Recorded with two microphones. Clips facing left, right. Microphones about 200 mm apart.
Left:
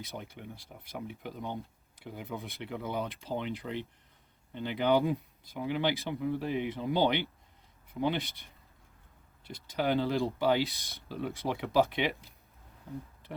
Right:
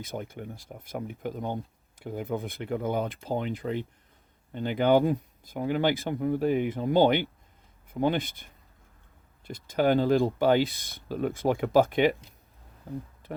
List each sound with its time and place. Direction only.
0.0 s speech: 50° right (ahead or behind)